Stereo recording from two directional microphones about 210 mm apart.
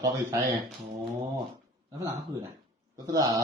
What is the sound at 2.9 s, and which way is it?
Speech, 15° right (ahead or behind).